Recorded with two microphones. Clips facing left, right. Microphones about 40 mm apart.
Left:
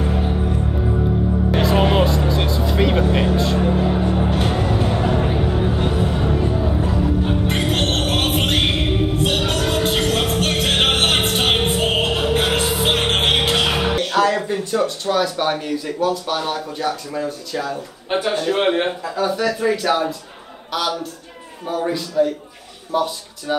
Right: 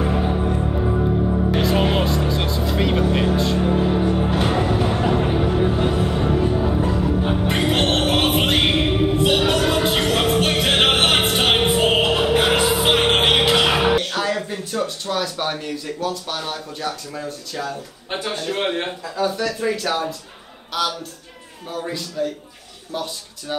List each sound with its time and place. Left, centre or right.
0.0 s music: centre
1.5 s music: centre
14.1 s a man's voice: centre